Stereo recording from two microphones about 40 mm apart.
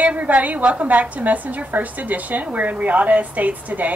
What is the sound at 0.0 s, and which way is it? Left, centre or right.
A woman's voice, right.